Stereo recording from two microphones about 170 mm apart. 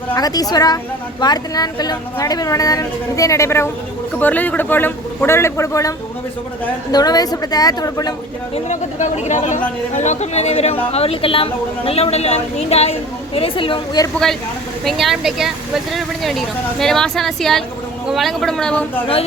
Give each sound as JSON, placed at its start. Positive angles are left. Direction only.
{"t": 0.1, "sound": "a woman's voice", "side_deg": 20}
{"t": 6.9, "sound": "a woman's voice", "side_deg": 25}
{"t": 8.5, "sound": "a woman's voice", "side_deg": 45}
{"t": 14.8, "sound": "speech", "side_deg": 0}